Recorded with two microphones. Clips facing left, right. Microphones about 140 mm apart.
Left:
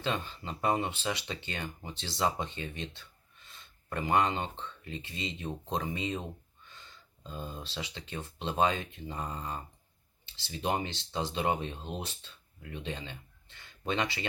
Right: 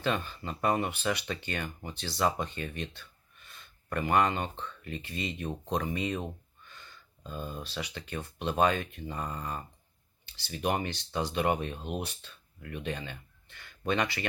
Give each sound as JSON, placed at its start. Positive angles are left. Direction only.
{"t": 0.0, "sound": "speech", "side_deg": 20}